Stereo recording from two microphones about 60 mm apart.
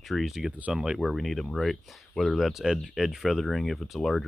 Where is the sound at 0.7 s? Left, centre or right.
Centre.